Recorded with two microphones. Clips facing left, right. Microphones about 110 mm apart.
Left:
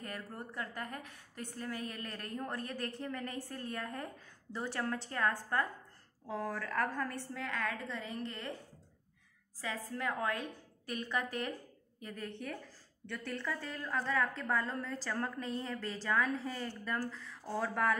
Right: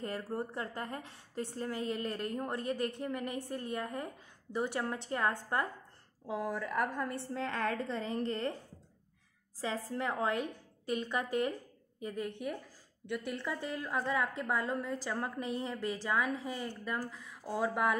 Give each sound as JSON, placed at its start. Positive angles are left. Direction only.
{"t": 0.0, "sound": "a woman's voice", "side_deg": -30}
{"t": 9.6, "sound": "a woman's voice", "side_deg": -30}